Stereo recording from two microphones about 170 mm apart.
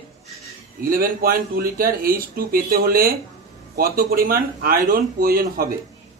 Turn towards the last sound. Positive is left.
turn(degrees=-60)  # may be behind; listen again after turning